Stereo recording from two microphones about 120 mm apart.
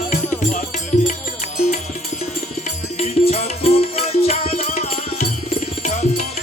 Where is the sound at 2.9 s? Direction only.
65° left (ahead or behind).